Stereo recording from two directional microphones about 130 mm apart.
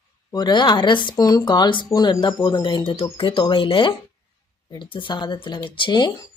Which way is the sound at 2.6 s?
35° left (ahead or behind).